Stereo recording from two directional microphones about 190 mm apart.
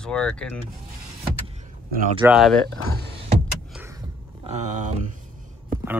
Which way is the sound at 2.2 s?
5° right (ahead or behind).